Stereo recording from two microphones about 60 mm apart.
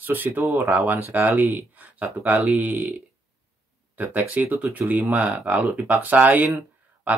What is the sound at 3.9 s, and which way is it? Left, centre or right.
Speech, right.